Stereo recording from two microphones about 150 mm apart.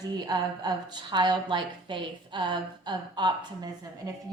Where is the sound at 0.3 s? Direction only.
25° right (ahead or behind).